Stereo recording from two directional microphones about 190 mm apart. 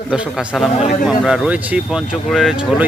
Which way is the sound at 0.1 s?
Centre (ahead or behind).